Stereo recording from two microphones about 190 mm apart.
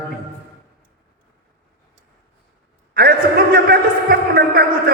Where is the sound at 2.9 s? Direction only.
50° right (ahead or behind).